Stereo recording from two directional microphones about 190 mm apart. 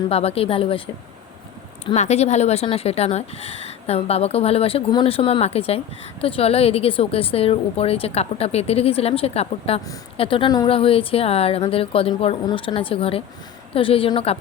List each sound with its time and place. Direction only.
0.1 s speech: 30° left (ahead or behind)
1.9 s speech: 35° left (ahead or behind)